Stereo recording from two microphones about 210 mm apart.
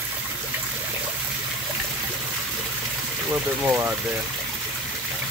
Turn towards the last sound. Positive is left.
turn(degrees=-10)  # may be behind; listen again after turning